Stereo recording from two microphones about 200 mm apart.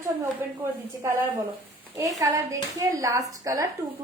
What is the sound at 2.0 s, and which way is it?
A woman's voice, 15° right (ahead or behind).